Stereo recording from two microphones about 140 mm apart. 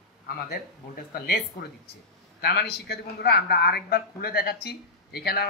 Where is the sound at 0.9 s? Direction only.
90° left.